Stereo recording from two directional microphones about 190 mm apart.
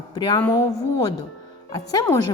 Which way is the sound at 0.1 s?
25° left (ahead or behind).